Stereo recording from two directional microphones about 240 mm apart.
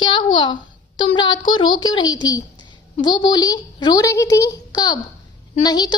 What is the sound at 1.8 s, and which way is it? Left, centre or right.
A child's voice, centre.